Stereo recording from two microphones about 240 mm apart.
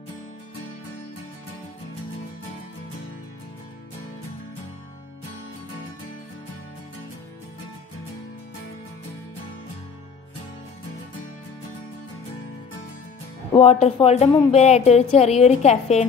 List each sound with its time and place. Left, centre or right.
13.5 s a woman's voice: left